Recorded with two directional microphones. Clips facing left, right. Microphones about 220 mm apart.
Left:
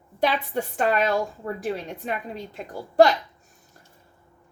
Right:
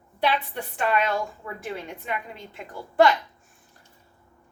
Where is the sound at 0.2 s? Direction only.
45° left (ahead or behind).